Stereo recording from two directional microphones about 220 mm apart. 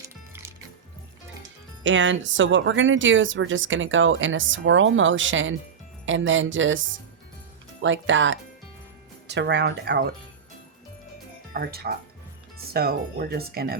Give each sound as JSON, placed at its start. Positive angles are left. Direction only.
{"t": 1.8, "sound": "speech", "side_deg": -55}
{"t": 11.5, "sound": "speech", "side_deg": -45}